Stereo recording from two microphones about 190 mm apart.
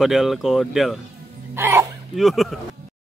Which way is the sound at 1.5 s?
10° right (ahead or behind).